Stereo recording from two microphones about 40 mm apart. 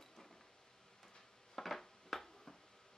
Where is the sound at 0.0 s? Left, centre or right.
Centre.